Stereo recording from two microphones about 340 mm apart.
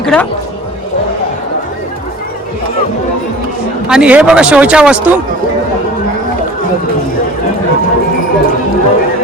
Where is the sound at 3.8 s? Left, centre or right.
Centre.